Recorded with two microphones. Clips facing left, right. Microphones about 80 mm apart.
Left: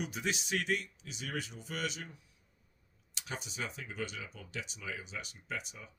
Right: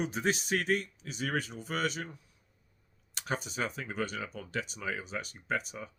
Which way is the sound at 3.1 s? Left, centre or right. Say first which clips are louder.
Right 7 dB; right.